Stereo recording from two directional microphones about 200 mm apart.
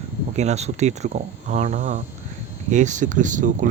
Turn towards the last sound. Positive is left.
turn(degrees=-40)  # may be behind; listen again after turning